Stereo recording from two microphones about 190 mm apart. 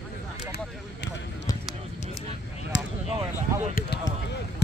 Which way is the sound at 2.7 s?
70° left (ahead or behind).